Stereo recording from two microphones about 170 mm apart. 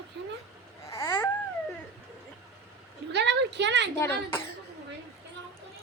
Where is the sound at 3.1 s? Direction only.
90° right.